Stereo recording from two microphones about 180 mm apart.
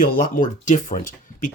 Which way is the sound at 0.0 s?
50° left (ahead or behind).